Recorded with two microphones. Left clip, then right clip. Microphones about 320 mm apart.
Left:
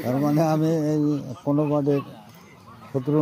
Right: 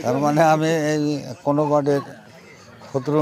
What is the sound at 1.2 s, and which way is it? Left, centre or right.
Speech, right.